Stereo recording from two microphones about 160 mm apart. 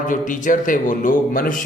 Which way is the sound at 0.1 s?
55° left (ahead or behind).